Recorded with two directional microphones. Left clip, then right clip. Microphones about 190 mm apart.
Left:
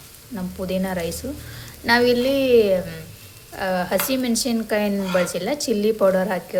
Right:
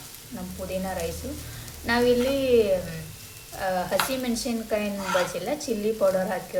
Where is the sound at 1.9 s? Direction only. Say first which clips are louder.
Left 5 dB; 30° left (ahead or behind).